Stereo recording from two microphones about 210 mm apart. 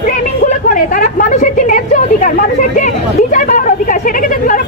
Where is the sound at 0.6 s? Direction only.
40° left (ahead or behind).